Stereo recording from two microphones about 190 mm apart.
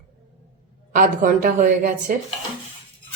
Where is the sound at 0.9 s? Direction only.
45° right (ahead or behind).